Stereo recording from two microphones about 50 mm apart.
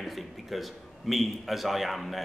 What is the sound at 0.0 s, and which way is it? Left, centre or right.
A man's voice, centre.